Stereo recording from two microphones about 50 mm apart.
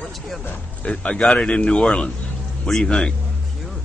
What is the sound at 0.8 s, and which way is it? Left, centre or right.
Speech, left.